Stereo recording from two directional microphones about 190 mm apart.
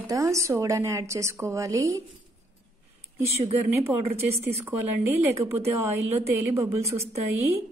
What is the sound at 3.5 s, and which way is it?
A woman's voice, 10° right (ahead or behind).